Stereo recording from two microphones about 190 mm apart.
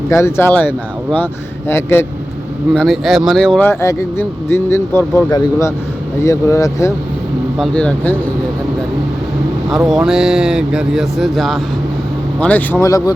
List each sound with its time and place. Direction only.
0.1 s speech: 15° left (ahead or behind)
2.7 s speech: centre (ahead or behind)
3.7 s speech: 15° left (ahead or behind)
7.6 s speech: 5° left (ahead or behind)
9.6 s speech: centre (ahead or behind)
12.8 s speech: 20° left (ahead or behind)